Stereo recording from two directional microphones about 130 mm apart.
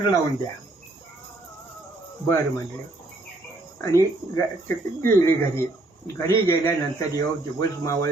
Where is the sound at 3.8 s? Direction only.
20° left (ahead or behind).